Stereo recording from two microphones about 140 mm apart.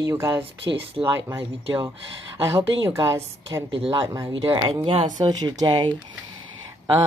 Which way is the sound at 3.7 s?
40° right (ahead or behind).